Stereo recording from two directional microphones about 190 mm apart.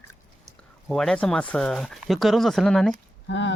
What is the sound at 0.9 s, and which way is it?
Speech, 5° left (ahead or behind).